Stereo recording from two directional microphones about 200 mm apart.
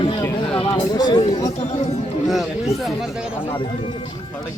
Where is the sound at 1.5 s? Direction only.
35° left (ahead or behind).